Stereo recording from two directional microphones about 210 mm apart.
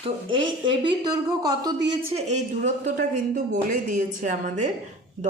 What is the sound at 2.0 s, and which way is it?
A woman's voice, 30° right (ahead or behind).